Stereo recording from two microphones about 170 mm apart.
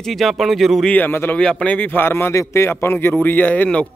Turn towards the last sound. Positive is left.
turn(degrees=10)  # may be behind; listen again after turning